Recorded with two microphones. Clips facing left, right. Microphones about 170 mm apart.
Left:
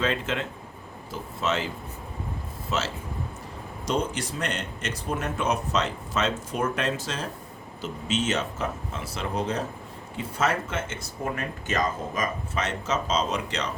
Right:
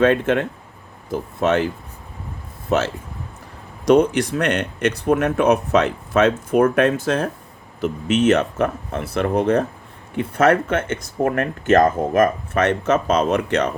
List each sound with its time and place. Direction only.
0.0 s speech: 55° right (ahead or behind)